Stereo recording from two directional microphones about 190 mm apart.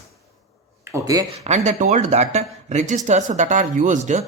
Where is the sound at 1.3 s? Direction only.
35° right (ahead or behind).